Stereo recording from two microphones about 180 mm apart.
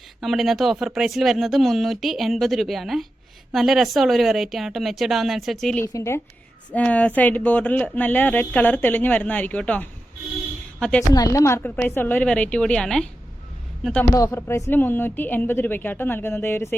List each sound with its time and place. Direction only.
0.2 s speech: centre (ahead or behind)
5.8 s a woman's voice: 15° left (ahead or behind)
11.1 s speech: 20° left (ahead or behind)
14.1 s speech: 15° left (ahead or behind)